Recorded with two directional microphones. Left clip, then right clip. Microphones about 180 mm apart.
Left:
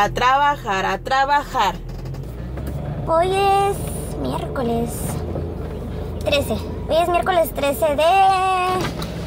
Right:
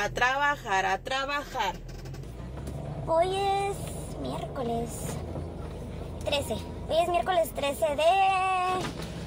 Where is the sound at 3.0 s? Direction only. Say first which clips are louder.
Left 9 dB; 5° left (ahead or behind).